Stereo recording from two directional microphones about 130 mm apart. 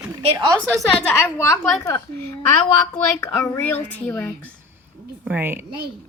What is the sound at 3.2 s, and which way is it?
Speech, 20° left (ahead or behind).